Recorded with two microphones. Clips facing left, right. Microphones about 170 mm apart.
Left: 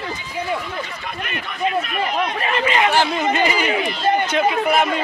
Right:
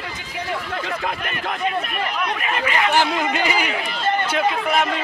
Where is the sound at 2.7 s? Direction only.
20° left (ahead or behind).